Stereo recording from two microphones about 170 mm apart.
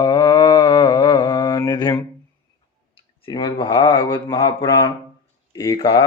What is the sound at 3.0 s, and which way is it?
Speech, 25° left (ahead or behind).